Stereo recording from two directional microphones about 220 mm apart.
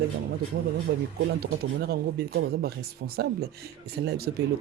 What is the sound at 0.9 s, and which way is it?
Speech, 55° right (ahead or behind).